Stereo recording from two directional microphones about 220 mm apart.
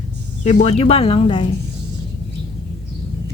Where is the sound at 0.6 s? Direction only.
30° left (ahead or behind).